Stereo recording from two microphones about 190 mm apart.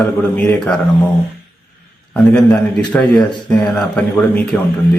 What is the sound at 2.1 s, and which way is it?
A man's voice, 5° left (ahead or behind).